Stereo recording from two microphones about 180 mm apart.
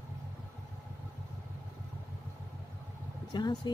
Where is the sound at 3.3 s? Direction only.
25° left (ahead or behind).